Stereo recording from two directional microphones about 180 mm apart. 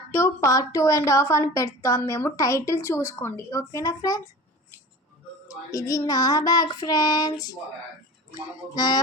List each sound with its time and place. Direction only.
0.1 s a woman's voice: 15° left (ahead or behind)
5.7 s child singing: 20° left (ahead or behind)